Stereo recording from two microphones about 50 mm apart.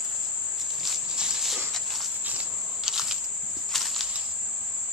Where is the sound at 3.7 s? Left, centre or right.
Centre.